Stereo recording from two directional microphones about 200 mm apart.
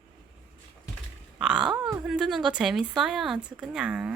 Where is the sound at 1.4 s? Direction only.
5° right (ahead or behind).